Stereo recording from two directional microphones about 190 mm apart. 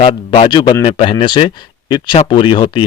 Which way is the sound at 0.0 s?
30° left (ahead or behind).